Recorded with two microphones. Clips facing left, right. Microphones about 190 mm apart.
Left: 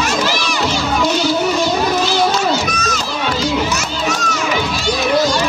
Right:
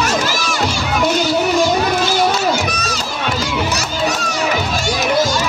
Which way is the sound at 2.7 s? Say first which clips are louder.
Left 2 dB; 35° right (ahead or behind).